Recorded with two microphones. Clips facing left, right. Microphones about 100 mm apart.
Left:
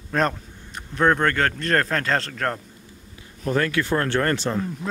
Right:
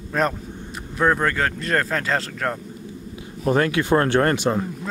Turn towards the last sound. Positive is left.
turn(degrees=-15)  # may be behind; listen again after turning